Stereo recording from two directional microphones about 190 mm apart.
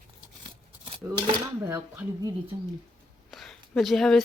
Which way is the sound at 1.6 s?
15° right (ahead or behind).